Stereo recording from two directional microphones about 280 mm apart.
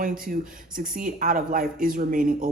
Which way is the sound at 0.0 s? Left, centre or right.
Right.